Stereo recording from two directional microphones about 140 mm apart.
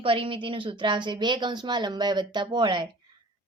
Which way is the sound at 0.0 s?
40° right (ahead or behind).